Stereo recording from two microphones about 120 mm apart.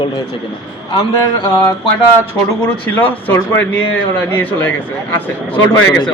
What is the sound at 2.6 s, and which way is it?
Speech, 15° left (ahead or behind).